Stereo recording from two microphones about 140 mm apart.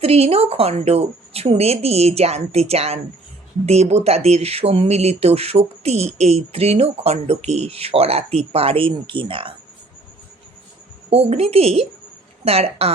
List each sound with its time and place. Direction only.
0.0 s speech: 45° right (ahead or behind)
11.1 s speech: 50° right (ahead or behind)